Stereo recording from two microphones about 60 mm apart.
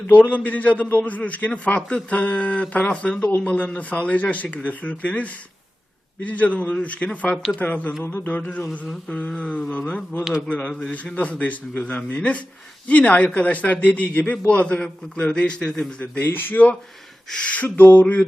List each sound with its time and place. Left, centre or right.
0.1 s a man's voice: left; by 15.9 s centre
16.0 s a man's voice: left